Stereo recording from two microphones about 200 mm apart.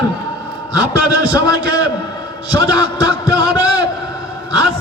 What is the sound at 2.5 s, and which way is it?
Speech, 20° left (ahead or behind).